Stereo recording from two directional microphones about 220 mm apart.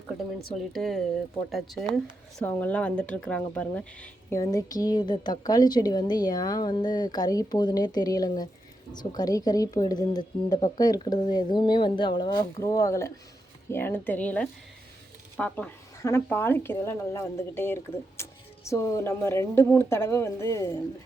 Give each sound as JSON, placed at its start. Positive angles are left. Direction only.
{"t": 0.4, "sound": "speech", "side_deg": 0}